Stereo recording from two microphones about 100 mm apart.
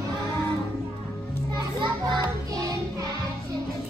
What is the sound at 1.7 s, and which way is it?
Music, 50° right (ahead or behind).